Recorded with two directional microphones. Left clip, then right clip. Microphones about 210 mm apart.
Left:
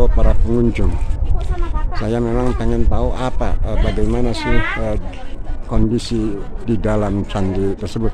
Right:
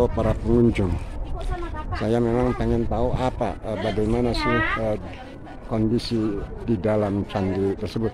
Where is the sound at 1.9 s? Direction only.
5° right (ahead or behind).